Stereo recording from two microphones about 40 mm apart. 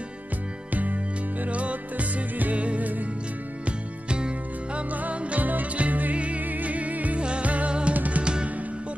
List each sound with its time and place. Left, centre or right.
1.4 s music: right
4.9 s music: right
7.2 s music: right
7.9 s music: right
8.2 s music: right